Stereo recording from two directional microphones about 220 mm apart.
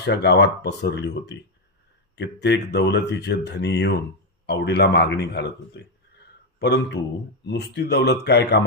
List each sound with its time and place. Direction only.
0.0 s speech: 50° left (ahead or behind)